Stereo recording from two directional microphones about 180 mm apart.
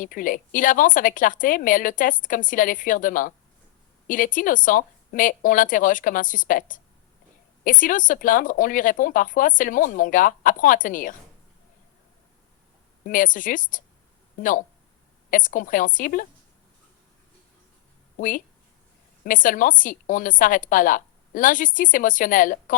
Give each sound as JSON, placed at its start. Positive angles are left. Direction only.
{"t": 0.0, "sound": "speech", "side_deg": 50}
{"t": 13.1, "sound": "speech", "side_deg": 50}
{"t": 15.3, "sound": "speech", "side_deg": 50}
{"t": 18.2, "sound": "speech", "side_deg": 50}